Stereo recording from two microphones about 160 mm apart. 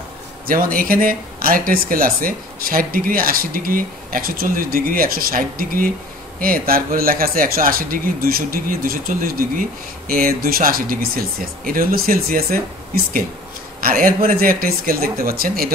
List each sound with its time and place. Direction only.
0.5 s speech: 65° right (ahead or behind)